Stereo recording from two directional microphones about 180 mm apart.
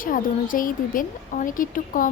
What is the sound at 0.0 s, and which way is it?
A woman's voice, 50° left (ahead or behind).